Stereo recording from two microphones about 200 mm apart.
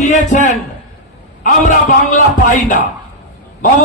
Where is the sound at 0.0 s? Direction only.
35° left (ahead or behind).